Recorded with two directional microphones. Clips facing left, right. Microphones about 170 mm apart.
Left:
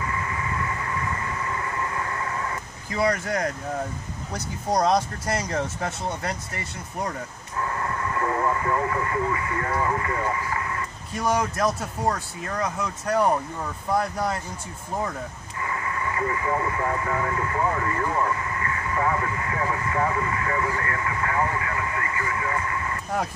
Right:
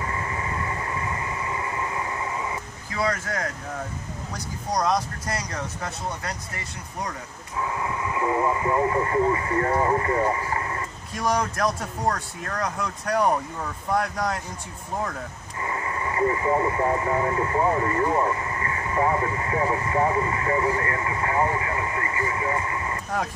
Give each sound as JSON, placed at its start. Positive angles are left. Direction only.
{"t": 0.0, "sound": "vehicle", "side_deg": -30}
{"t": 4.6, "sound": "speech", "side_deg": 25}
{"t": 7.5, "sound": "speech", "side_deg": -5}
{"t": 11.1, "sound": "speech", "side_deg": 5}
{"t": 15.6, "sound": "speech", "side_deg": -25}